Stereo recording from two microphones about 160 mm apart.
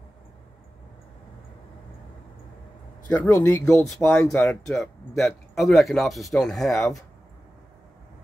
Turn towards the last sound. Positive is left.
turn(degrees=0)  # may be behind; listen again after turning